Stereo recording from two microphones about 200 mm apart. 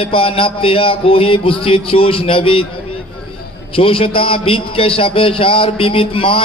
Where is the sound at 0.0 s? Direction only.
25° left (ahead or behind).